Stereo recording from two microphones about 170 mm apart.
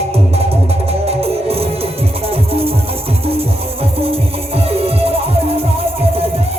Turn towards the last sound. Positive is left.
turn(degrees=-35)  # may be behind; listen again after turning